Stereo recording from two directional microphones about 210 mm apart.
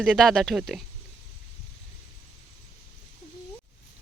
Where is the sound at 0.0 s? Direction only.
Centre (ahead or behind).